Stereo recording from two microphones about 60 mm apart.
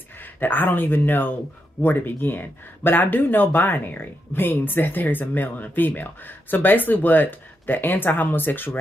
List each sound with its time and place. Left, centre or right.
0.2 s speech: left